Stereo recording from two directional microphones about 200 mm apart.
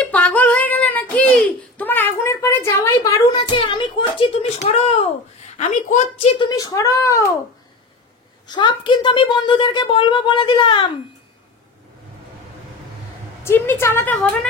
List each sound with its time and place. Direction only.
0.0 s a sound: 5° left (ahead or behind); by 5.1 s 30° left (ahead or behind)
5.6 s a woman's voice: 35° left (ahead or behind)
6.3 s speech: 20° left (ahead or behind)
8.5 s speech: 20° left (ahead or behind)
13.4 s speech: 10° left (ahead or behind)